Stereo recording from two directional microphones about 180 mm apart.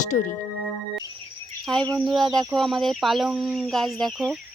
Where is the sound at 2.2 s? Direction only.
20° right (ahead or behind).